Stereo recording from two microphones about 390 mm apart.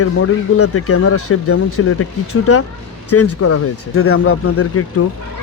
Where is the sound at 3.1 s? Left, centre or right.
Left.